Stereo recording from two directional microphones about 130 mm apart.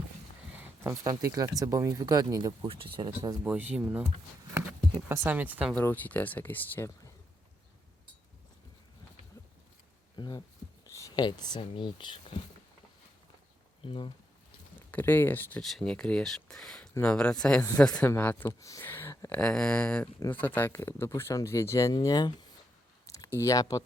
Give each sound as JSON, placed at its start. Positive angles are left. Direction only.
{"t": 0.6, "sound": "a sound", "side_deg": -20}
{"t": 1.2, "sound": "speech", "side_deg": -25}
{"t": 2.6, "sound": "speech", "side_deg": -45}
{"t": 3.4, "sound": "speech", "side_deg": -10}
{"t": 5.0, "sound": "speech", "side_deg": -15}
{"t": 5.7, "sound": "speech", "side_deg": 15}
{"t": 10.2, "sound": "speech", "side_deg": 30}
{"t": 13.8, "sound": "speech", "side_deg": 40}
{"t": 14.8, "sound": "speech", "side_deg": 15}
{"t": 15.6, "sound": "speech", "side_deg": 5}
{"t": 18.6, "sound": "a sound", "side_deg": 20}
{"t": 19.3, "sound": "speech", "side_deg": 5}